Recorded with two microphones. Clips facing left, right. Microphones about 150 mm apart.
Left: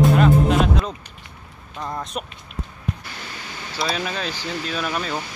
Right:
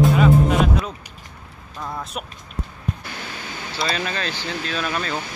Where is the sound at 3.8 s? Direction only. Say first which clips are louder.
Even; 5° left (ahead or behind).